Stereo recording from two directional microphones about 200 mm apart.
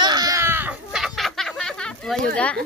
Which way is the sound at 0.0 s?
20° right (ahead or behind).